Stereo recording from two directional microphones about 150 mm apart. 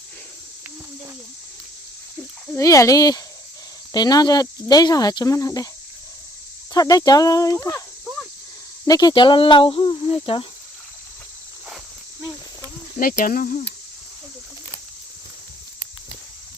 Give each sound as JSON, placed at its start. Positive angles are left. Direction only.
{"t": 2.6, "sound": "speech", "side_deg": 20}
{"t": 6.7, "sound": "speech", "side_deg": 25}
{"t": 8.9, "sound": "speech", "side_deg": 25}
{"t": 13.0, "sound": "cricket", "side_deg": 70}